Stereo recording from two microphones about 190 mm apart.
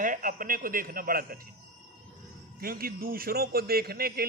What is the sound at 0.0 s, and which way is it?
A man's voice, 45° right (ahead or behind).